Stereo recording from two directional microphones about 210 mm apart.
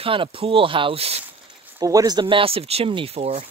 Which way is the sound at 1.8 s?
15° right (ahead or behind).